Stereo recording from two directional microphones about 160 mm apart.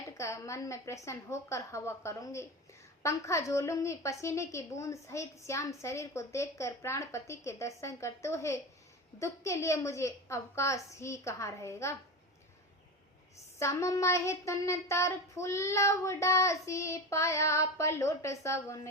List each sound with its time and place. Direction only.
0.0 s a woman's voice: 20° left (ahead or behind)
13.6 s a woman's voice: 20° left (ahead or behind)